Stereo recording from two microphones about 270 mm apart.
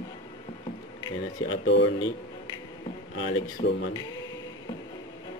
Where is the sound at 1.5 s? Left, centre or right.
Left.